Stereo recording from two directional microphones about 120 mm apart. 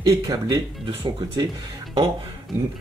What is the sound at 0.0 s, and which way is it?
Speech, 30° right (ahead or behind).